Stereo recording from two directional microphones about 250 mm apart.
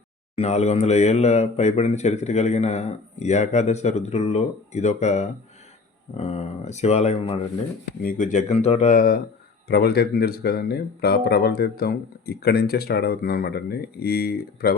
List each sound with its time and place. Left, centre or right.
0.3 s speech: left